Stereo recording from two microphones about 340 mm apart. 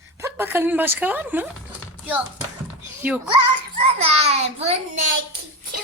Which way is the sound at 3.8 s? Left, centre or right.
Centre.